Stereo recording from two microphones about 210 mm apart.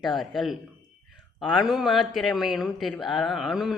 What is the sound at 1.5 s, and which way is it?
A woman's voice, centre (ahead or behind).